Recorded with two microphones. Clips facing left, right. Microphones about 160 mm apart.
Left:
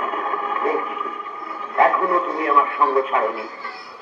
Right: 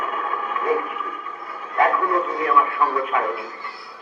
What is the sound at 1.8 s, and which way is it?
Speech, 30° left (ahead or behind).